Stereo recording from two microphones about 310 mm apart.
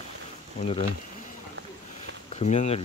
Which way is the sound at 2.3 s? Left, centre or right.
Left.